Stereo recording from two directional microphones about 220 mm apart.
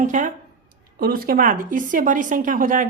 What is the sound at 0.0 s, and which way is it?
Speech, 35° right (ahead or behind).